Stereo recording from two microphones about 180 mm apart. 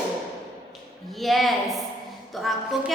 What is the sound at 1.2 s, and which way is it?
A woman's voice, centre (ahead or behind).